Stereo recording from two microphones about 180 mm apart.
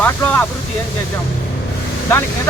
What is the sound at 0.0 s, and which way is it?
Vehicle, 10° left (ahead or behind).